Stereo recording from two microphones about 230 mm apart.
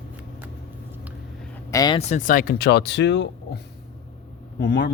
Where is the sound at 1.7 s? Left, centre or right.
Centre; by 3.6 s left.